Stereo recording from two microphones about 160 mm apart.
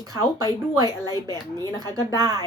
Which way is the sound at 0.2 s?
25° right (ahead or behind).